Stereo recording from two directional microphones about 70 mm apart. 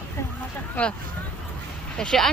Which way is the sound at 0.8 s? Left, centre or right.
Left.